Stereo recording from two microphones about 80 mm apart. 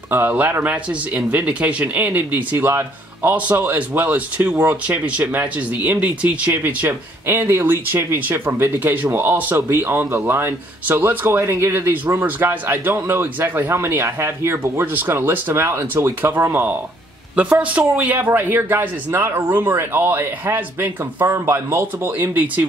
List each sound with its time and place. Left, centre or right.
0.3 s speech: right
17.4 s speech: centre